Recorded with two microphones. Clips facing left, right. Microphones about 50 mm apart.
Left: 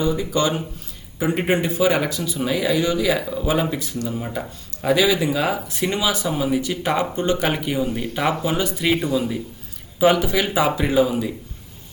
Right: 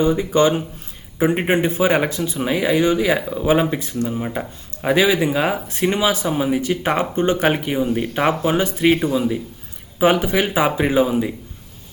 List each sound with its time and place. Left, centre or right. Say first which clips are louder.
0.0 s speech: right 5 dB; right